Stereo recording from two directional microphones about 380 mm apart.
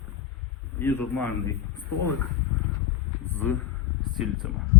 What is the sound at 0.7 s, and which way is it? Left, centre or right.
Speech, centre.